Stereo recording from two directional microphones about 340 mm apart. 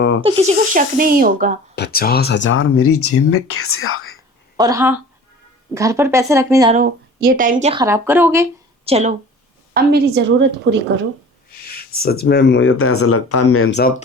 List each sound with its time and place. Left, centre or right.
0.2 s speech: centre
1.7 s speech: left
4.5 s speech: centre
6.7 s speech: right
9.7 s a woman's voice: right
11.9 s speech: left